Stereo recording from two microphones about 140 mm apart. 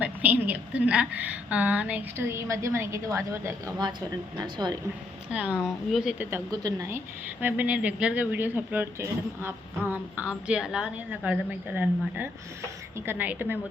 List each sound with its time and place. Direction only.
0.0 s speech: 10° right (ahead or behind)
4.4 s speech: 30° right (ahead or behind)
5.6 s speech: 5° right (ahead or behind)
6.3 s speech: 25° right (ahead or behind)
7.4 s speech: 10° right (ahead or behind)